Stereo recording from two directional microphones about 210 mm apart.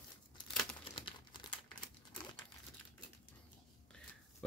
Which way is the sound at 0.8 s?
25° left (ahead or behind).